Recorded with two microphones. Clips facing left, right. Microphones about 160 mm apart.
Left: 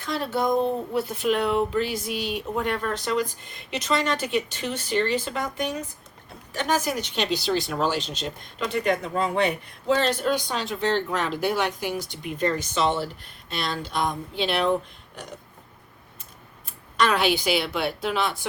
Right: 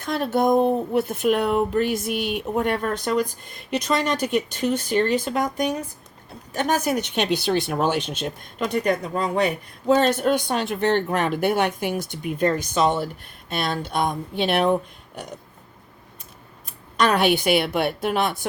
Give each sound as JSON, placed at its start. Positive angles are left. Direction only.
{"t": 0.0, "sound": "speech", "side_deg": -55}
{"t": 17.0, "sound": "speech", "side_deg": -50}